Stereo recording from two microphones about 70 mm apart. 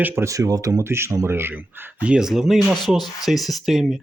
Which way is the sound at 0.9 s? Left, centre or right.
Right.